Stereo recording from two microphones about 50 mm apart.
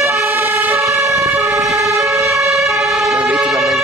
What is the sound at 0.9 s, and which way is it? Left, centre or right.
Emergency vehicle, right.